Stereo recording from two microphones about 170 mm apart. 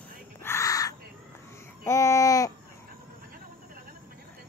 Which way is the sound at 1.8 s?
15° left (ahead or behind).